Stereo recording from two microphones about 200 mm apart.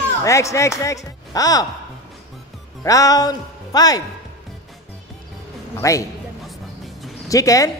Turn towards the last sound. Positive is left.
turn(degrees=15)  # may be behind; listen again after turning